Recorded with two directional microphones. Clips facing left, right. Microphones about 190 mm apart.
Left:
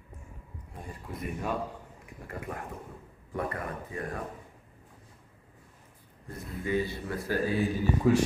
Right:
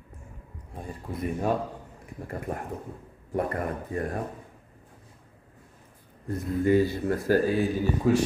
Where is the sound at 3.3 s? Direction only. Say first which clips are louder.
Right 6 dB; 40° right (ahead or behind).